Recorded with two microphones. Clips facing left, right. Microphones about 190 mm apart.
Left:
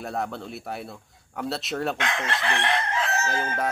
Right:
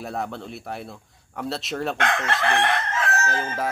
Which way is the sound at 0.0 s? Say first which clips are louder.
Even; centre (ahead or behind).